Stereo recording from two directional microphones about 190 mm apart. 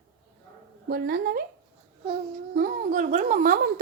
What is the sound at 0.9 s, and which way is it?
Speech, 55° right (ahead or behind).